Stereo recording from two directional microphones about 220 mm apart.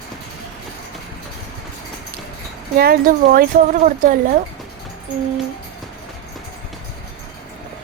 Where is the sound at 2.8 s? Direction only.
40° right (ahead or behind).